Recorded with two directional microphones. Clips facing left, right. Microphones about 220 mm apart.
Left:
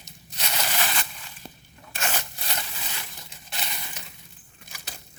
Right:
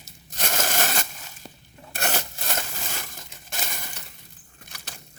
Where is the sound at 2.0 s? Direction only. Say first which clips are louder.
Right 3 dB; 45° right (ahead or behind).